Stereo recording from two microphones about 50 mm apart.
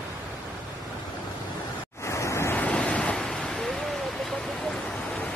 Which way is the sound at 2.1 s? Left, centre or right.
Left.